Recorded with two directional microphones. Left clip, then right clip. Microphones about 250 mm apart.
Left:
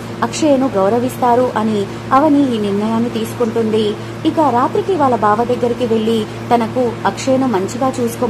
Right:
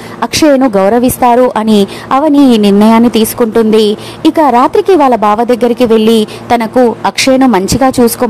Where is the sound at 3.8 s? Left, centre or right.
Right.